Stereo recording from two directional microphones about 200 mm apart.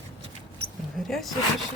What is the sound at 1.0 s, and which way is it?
Speech, centre (ahead or behind).